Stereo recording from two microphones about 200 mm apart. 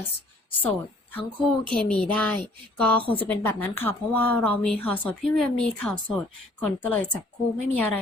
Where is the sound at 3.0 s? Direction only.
25° left (ahead or behind).